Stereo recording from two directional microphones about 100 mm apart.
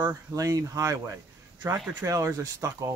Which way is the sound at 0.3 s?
35° right (ahead or behind).